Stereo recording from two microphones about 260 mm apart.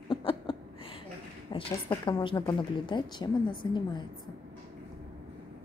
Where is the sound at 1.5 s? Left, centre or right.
Centre.